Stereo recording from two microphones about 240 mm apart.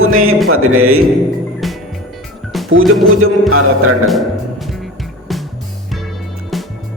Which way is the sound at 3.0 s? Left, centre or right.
Right.